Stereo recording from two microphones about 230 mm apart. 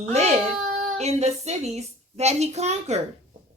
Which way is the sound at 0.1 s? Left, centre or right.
Right.